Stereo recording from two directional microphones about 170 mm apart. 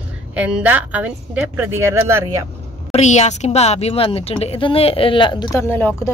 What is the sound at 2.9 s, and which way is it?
Speech, 40° left (ahead or behind).